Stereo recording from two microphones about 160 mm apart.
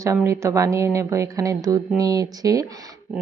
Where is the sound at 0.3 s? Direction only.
20° right (ahead or behind).